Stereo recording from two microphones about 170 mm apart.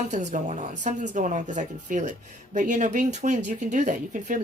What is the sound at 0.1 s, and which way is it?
Speech, 45° right (ahead or behind).